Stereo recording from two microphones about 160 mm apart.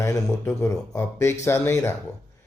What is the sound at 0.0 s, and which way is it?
A man's voice, 20° left (ahead or behind).